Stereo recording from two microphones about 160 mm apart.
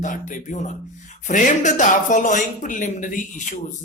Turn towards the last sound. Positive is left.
turn(degrees=50)  # may be behind; listen again after turning